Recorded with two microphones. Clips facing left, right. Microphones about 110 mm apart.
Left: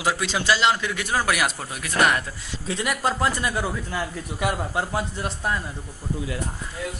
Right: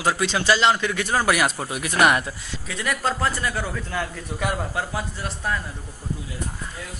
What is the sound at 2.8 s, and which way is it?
Speech, 15° left (ahead or behind).